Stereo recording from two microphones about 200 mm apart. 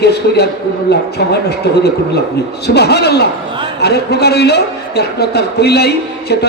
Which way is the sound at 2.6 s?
55° left (ahead or behind).